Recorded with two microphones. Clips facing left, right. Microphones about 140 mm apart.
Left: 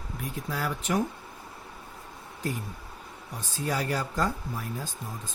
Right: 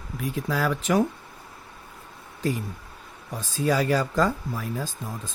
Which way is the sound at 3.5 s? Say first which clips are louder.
Right 7 dB; 90° right.